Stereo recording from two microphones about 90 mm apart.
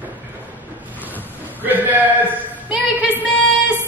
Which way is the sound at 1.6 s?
20° right (ahead or behind).